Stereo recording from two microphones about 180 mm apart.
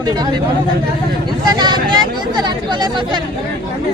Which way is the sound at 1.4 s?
25° right (ahead or behind).